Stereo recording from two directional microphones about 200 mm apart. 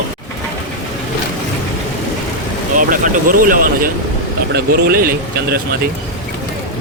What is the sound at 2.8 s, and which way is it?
Speech, 40° right (ahead or behind).